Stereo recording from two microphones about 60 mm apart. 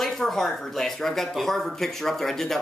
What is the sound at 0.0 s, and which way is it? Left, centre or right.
Speech, centre.